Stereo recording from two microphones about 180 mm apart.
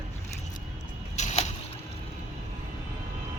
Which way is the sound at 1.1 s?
40° left (ahead or behind).